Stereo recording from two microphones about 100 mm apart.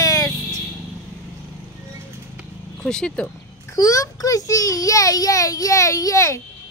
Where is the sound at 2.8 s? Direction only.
5° left (ahead or behind).